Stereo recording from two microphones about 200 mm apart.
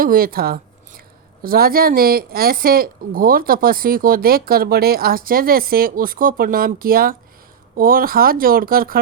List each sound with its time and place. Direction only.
0.0 s speech: 45° right (ahead or behind)